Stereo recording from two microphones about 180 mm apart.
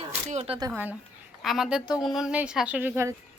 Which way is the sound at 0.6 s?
15° right (ahead or behind).